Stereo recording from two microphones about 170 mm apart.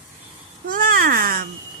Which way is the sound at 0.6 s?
55° right (ahead or behind).